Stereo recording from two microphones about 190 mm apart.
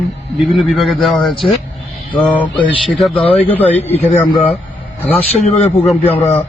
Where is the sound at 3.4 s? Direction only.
10° left (ahead or behind).